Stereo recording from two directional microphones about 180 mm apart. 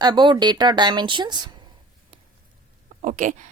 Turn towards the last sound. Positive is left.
turn(degrees=-45)  # may be behind; listen again after turning